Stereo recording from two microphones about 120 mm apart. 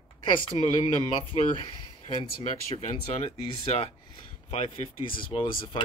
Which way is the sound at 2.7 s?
70° left (ahead or behind).